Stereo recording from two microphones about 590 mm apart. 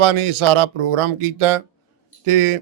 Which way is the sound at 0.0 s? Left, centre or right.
Right.